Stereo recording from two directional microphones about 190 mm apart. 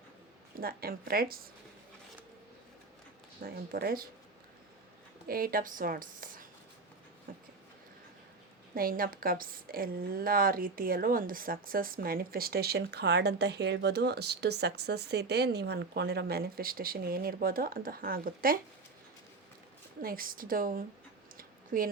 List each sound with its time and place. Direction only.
0.6 s a woman's voice: 50° right (ahead or behind)
3.4 s a woman's voice: 50° right (ahead or behind)
5.3 s a woman's voice: 50° right (ahead or behind)
7.3 s a sound: 45° right (ahead or behind)
8.7 s a woman's voice: 50° right (ahead or behind)
20.0 s a woman's voice: 50° right (ahead or behind)
21.3 s a sound: 50° right (ahead or behind)